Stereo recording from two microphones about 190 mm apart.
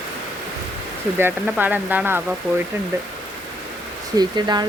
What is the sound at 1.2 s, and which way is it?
Speech, 10° right (ahead or behind).